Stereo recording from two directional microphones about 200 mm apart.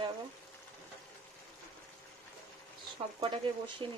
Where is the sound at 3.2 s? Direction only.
25° right (ahead or behind).